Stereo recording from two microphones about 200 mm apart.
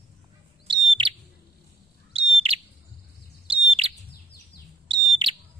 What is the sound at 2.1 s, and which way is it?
Bird, 30° right (ahead or behind).